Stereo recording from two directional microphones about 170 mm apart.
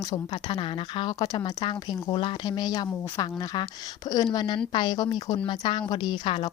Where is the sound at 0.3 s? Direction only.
35° left (ahead or behind).